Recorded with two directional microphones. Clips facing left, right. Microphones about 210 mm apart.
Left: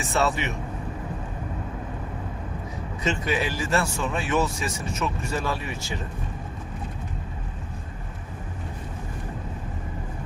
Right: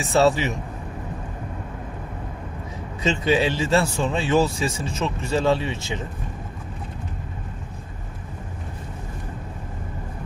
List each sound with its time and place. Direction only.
0.0 s speech: 30° right (ahead or behind)
3.0 s speech: 30° right (ahead or behind)